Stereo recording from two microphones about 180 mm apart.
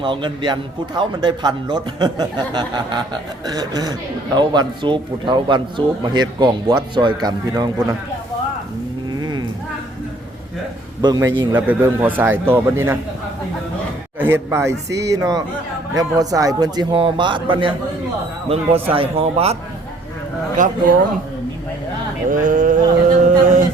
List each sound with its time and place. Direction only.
0.0 s a man's voice: 25° right (ahead or behind)
9.1 s cattle: 25° right (ahead or behind)
11.0 s a man's voice: 20° right (ahead or behind)
11.5 s a man's voice: 10° right (ahead or behind)
14.2 s a man's voice: 15° right (ahead or behind); by 19.5 s 35° right (ahead or behind)
20.6 s speech: 50° right (ahead or behind)
22.3 s mantra: 45° right (ahead or behind)